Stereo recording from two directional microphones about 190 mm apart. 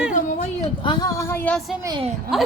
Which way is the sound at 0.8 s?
20° left (ahead or behind).